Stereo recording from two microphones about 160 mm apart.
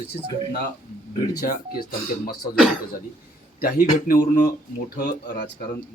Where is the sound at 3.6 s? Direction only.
60° left (ahead or behind).